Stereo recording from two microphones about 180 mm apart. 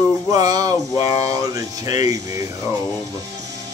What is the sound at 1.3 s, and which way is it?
Speech, 20° right (ahead or behind).